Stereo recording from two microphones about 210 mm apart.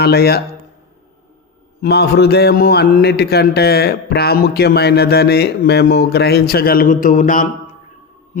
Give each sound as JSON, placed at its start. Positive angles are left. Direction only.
{"t": 0.0, "sound": "a man's voice", "side_deg": 50}
{"t": 1.8, "sound": "a man's voice", "side_deg": 50}